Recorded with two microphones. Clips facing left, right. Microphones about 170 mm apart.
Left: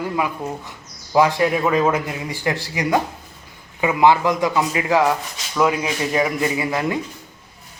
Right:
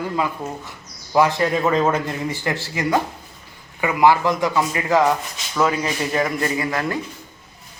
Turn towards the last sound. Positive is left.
turn(degrees=15)  # may be behind; listen again after turning